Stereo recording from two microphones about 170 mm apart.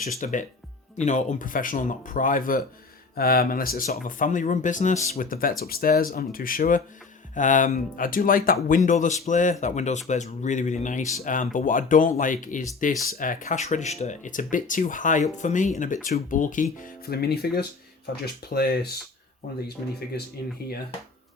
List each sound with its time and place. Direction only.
0.2 s speech: 50° left (ahead or behind)
8.5 s speech: 45° left (ahead or behind); by 18.9 s 65° left (ahead or behind)
20.6 s speech: 70° left (ahead or behind)